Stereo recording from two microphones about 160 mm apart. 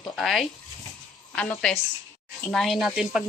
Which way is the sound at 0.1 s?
Centre (ahead or behind).